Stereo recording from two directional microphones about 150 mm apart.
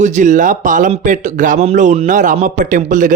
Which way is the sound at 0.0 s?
55° right (ahead or behind).